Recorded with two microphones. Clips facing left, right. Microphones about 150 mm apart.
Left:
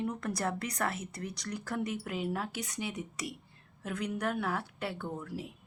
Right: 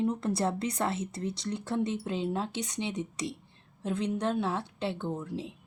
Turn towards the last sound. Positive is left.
turn(degrees=-20)  # may be behind; listen again after turning